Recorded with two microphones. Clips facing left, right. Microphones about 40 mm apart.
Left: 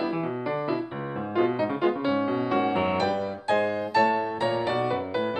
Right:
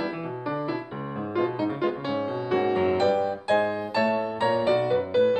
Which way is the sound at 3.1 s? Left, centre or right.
Centre.